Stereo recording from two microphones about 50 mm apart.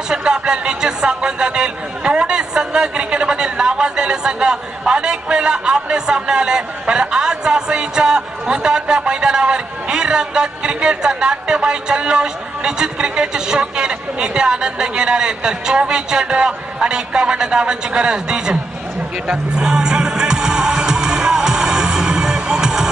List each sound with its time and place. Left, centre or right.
0.1 s speech: centre
19.2 s speech: right
19.6 s music: centre